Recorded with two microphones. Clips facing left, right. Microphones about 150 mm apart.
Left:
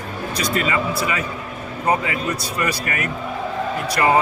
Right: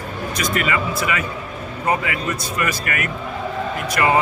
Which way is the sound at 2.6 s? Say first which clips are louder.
Even; 30° left (ahead or behind).